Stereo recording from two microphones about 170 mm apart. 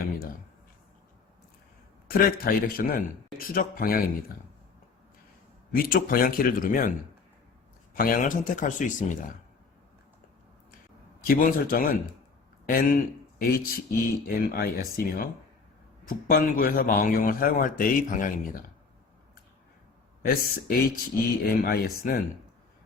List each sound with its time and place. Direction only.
2.0 s a man's voice: 60° left (ahead or behind)
5.7 s a man's voice: 60° left (ahead or behind)
7.9 s speech: 55° left (ahead or behind)
11.3 s a man's voice: 55° left (ahead or behind)
20.2 s a man's voice: 60° left (ahead or behind)